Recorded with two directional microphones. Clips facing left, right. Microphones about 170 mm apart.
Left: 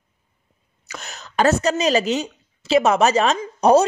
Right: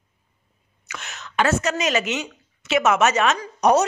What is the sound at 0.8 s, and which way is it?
Speech, 35° left (ahead or behind).